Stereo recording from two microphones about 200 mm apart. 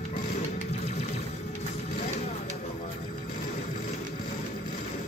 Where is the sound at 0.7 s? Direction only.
30° left (ahead or behind).